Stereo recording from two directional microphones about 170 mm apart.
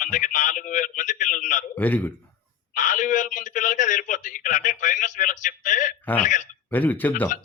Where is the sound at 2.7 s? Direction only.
50° left (ahead or behind).